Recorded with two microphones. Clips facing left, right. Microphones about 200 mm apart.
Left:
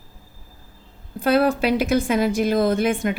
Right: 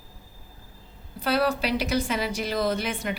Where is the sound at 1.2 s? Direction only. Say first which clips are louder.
Left 6 dB; 50° left (ahead or behind).